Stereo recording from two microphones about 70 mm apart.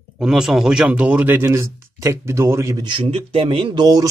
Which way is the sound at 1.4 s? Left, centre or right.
Right.